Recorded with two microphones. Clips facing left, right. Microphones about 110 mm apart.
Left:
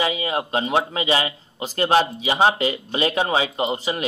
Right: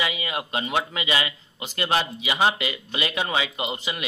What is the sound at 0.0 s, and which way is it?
Speech, 35° left (ahead or behind).